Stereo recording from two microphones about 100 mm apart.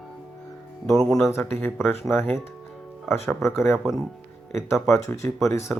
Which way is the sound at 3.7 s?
Centre (ahead or behind).